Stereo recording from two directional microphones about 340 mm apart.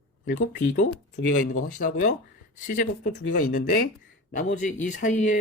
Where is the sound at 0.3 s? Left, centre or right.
Left.